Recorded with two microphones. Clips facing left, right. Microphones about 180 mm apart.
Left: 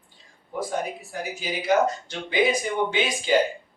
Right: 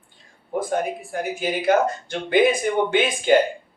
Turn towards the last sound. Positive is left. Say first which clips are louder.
# right 5 dB
turn(degrees=-55)  # may be behind; listen again after turning